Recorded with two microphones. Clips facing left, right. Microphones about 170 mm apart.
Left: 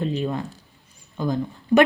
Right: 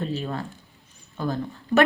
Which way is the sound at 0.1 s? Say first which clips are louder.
Left 4 dB; 15° left (ahead or behind).